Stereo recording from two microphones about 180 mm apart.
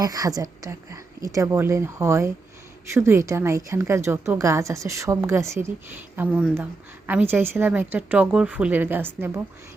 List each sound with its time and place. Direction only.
0.0 s a woman's voice: 20° right (ahead or behind)